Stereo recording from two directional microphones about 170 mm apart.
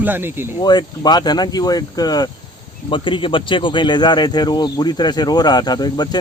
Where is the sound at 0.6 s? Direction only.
25° left (ahead or behind).